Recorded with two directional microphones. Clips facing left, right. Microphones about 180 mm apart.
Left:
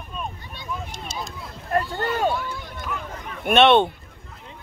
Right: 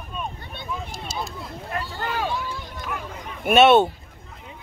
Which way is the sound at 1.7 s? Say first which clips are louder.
Left 6 dB; 45° left (ahead or behind).